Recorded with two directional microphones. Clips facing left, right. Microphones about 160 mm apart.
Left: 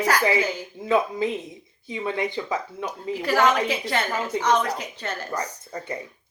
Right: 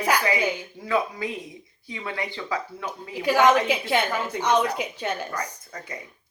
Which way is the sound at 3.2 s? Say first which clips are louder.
Right 2 dB; 10° right (ahead or behind).